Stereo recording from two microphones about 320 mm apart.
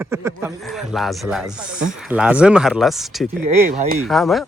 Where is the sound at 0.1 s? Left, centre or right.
Centre.